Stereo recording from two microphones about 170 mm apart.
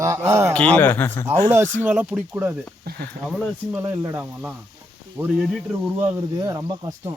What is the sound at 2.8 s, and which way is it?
Speech, 65° right (ahead or behind).